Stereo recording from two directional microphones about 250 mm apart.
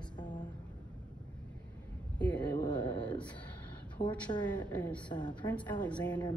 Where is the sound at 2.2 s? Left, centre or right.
Centre.